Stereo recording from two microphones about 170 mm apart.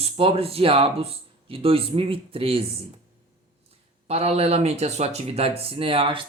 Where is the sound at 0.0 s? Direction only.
35° right (ahead or behind).